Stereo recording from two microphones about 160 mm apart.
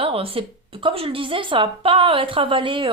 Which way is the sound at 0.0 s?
35° right (ahead or behind).